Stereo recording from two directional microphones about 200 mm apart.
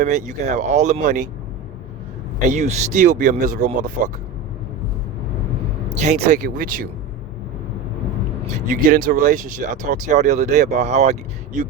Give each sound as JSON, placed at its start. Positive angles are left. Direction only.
{"t": 0.0, "sound": "speech", "side_deg": -40}
{"t": 2.5, "sound": "speech", "side_deg": -35}
{"t": 6.1, "sound": "speech", "side_deg": -40}
{"t": 8.6, "sound": "speech", "side_deg": -45}